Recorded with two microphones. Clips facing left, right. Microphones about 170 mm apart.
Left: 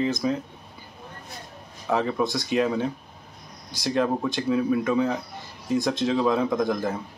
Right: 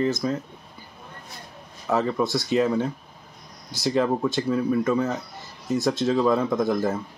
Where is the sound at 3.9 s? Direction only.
Centre (ahead or behind).